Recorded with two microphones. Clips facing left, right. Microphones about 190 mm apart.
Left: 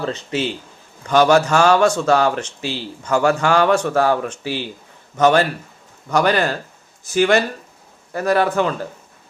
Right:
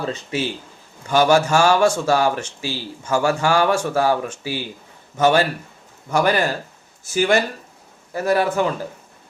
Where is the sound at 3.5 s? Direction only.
10° right (ahead or behind).